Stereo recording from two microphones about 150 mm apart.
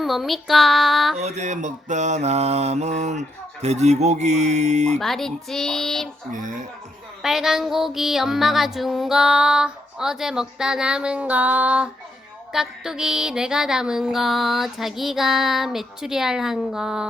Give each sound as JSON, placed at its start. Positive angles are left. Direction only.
{"t": 0.0, "sound": "female singing", "side_deg": 0}
{"t": 1.2, "sound": "mantra", "side_deg": -50}
{"t": 4.9, "sound": "female singing", "side_deg": 0}
{"t": 6.3, "sound": "speech", "side_deg": -60}
{"t": 7.2, "sound": "female singing", "side_deg": 0}